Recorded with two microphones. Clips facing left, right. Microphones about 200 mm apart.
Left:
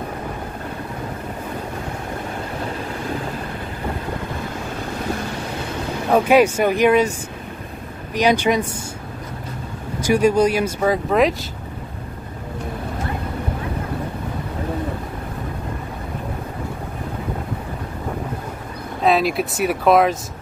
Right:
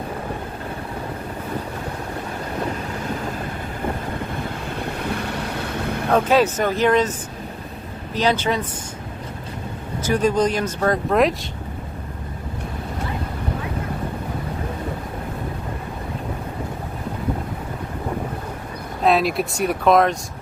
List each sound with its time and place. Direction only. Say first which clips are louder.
6.1 s speech: left 3 dB; 10° left (ahead or behind)
9.9 s speech: left 3 dB; 10° left (ahead or behind)
19.0 s speech: left 1 dB; centre (ahead or behind)